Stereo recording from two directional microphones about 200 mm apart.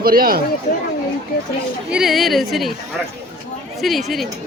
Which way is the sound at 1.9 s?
Centre (ahead or behind).